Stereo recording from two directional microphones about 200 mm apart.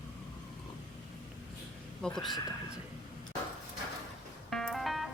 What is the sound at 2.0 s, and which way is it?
Speech, 5° left (ahead or behind).